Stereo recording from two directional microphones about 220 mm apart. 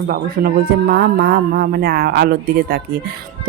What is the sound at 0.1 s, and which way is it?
Speech, 45° right (ahead or behind).